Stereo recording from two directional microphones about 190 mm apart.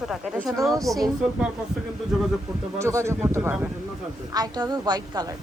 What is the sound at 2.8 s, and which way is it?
A woman's voice, 15° right (ahead or behind).